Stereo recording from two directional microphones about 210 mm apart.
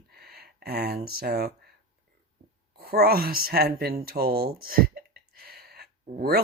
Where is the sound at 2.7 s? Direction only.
45° right (ahead or behind).